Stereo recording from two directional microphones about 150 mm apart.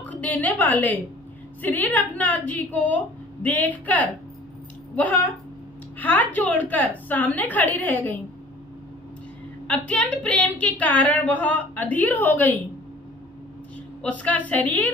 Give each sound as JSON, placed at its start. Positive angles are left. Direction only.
{"t": 0.0, "sound": "a woman's voice", "side_deg": 10}
{"t": 9.7, "sound": "a woman's voice", "side_deg": 10}
{"t": 14.0, "sound": "a woman's voice", "side_deg": 10}